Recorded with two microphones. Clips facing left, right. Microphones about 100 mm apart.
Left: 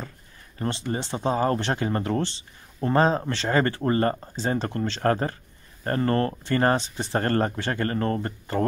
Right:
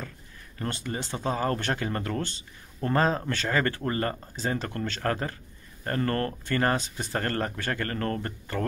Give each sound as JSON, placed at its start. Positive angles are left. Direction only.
{"t": 0.6, "sound": "speech", "side_deg": 25}